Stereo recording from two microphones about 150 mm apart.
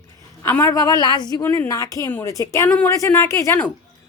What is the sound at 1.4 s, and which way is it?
A woman's voice, 15° left (ahead or behind).